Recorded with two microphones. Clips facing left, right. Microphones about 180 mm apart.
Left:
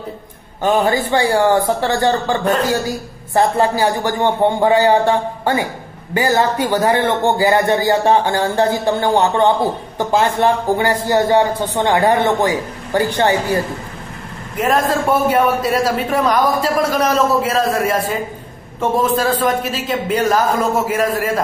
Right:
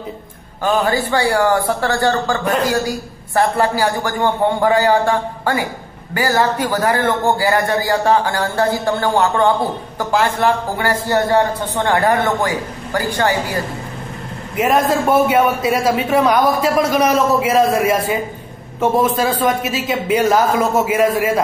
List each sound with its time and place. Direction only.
0.6 s a man's voice: 20° left (ahead or behind)
3.3 s a man's voice: 20° left (ahead or behind)
14.6 s a man's voice: 10° right (ahead or behind)